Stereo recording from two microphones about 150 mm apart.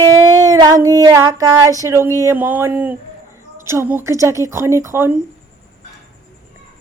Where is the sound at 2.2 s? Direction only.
15° right (ahead or behind).